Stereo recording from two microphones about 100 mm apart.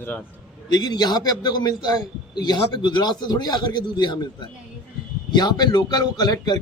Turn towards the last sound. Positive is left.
turn(degrees=45)  # may be behind; listen again after turning